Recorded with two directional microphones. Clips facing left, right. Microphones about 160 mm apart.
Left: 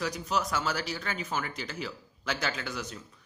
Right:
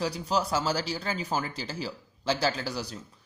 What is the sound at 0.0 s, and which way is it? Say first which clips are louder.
Speech: right 3 dB; 30° right (ahead or behind).